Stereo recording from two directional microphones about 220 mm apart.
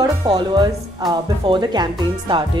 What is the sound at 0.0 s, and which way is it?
Speech, 20° right (ahead or behind).